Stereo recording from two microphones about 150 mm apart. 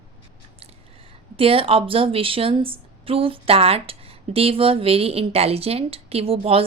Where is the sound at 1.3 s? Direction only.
40° right (ahead or behind).